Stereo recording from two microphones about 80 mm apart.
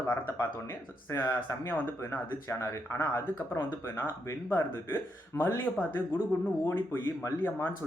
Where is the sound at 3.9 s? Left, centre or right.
Left.